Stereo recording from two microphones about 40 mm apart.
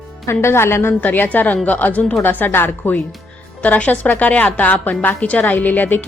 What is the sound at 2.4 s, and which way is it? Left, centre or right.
Speech, left.